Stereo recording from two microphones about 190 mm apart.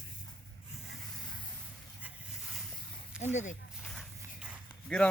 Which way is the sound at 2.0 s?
5° right (ahead or behind).